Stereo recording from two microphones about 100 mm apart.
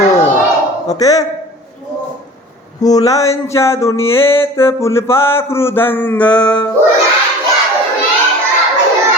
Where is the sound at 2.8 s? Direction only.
40° left (ahead or behind).